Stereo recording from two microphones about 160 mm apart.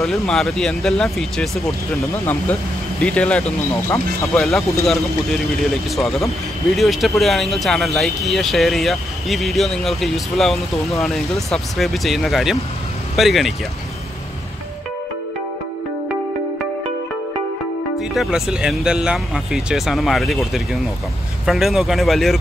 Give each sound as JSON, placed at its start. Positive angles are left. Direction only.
{"t": 0.0, "sound": "speech", "side_deg": 0}
{"t": 3.9, "sound": "speech", "side_deg": 20}
{"t": 4.4, "sound": "speech", "side_deg": 0}
{"t": 18.1, "sound": "speech", "side_deg": 0}